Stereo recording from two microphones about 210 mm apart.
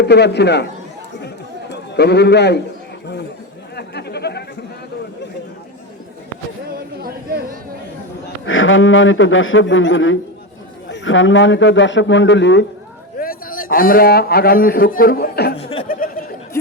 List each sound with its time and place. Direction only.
0.0 s speech: 55° left (ahead or behind)
1.7 s a man's voice: 50° left (ahead or behind)
3.8 s a sound: 50° left (ahead or behind)
8.4 s a man's voice: 70° left (ahead or behind)
13.1 s a man's voice: 45° left (ahead or behind)
15.5 s chuckle: 30° left (ahead or behind)
15.9 s a sound: 40° left (ahead or behind)